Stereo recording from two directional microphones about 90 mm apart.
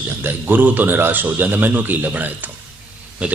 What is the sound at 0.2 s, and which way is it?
A man's voice, 25° right (ahead or behind).